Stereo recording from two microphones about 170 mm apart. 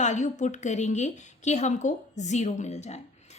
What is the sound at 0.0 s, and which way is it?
A woman's voice, 45° left (ahead or behind).